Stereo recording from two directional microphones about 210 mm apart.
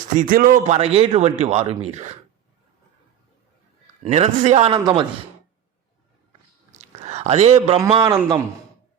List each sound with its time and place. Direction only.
0.2 s a man's voice: 40° right (ahead or behind)
4.0 s a man's voice: 30° right (ahead or behind)
6.7 s whispering: 30° right (ahead or behind)
7.8 s a man's voice: 20° right (ahead or behind)